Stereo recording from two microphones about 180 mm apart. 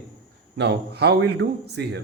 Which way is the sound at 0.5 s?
70° right (ahead or behind).